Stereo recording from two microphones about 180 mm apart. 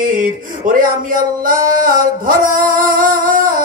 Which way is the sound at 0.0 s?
50° right (ahead or behind).